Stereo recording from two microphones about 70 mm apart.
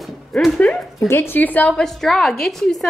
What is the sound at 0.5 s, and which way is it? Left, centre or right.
Speech, centre.